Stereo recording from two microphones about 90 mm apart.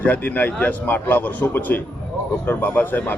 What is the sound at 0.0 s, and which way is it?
Speech, 20° left (ahead or behind).